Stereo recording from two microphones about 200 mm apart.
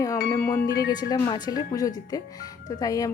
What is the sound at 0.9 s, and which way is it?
Speech, 20° left (ahead or behind).